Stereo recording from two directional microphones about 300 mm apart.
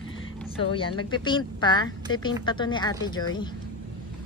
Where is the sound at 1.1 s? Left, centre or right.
Centre.